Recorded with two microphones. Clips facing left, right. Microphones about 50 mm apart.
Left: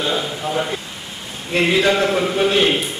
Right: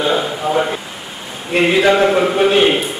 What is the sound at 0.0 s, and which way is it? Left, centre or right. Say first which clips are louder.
A man's voice: right 5 dB; centre.